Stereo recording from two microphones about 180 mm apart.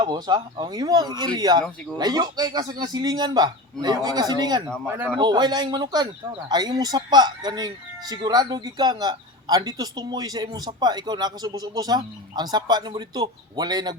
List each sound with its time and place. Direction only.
0.0 s speech: 25° right (ahead or behind)